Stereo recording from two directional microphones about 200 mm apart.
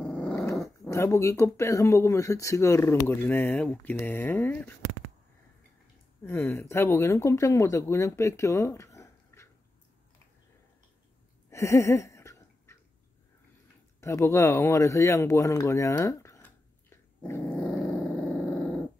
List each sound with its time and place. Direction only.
0.0 s dog: 5° left (ahead or behind)
0.8 s speech: 15° left (ahead or behind)
6.2 s speech: 10° left (ahead or behind)
11.5 s a sound: 15° left (ahead or behind)
14.0 s speech: 15° left (ahead or behind)